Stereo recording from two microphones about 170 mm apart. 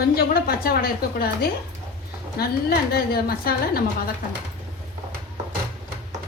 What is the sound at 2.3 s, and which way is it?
A woman's voice, 65° left (ahead or behind).